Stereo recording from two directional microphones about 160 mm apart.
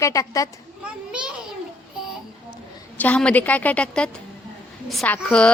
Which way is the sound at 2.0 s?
5° right (ahead or behind).